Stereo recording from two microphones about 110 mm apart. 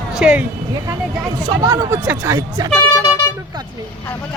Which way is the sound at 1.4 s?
35° right (ahead or behind).